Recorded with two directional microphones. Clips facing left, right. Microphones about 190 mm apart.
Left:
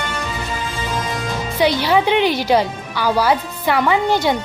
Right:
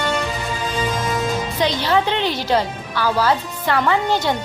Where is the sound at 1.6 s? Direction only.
10° left (ahead or behind).